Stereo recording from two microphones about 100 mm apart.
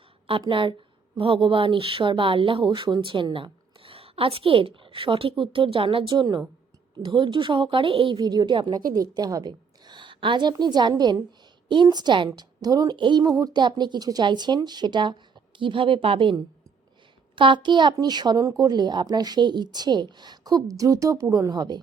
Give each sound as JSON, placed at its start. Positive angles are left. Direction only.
{"t": 0.4, "sound": "speech", "side_deg": -55}
{"t": 2.6, "sound": "a woman's voice", "side_deg": -50}
{"t": 8.2, "sound": "a woman's voice", "side_deg": -45}
{"t": 12.4, "sound": "a woman's voice", "side_deg": -40}
{"t": 13.0, "sound": "a woman's voice", "side_deg": -50}
{"t": 13.2, "sound": "a woman's voice", "side_deg": -35}